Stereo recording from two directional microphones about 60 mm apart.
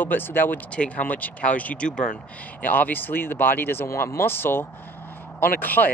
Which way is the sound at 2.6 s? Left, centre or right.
Left.